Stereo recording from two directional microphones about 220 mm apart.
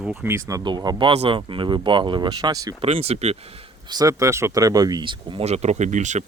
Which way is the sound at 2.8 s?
30° right (ahead or behind).